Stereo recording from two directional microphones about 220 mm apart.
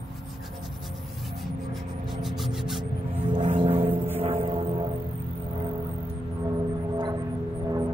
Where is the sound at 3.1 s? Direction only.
25° right (ahead or behind).